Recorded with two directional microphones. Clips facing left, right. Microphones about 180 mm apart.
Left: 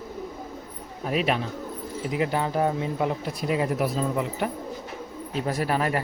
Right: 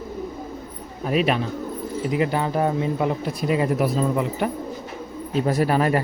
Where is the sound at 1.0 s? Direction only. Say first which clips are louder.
Right 4 dB; 80° right.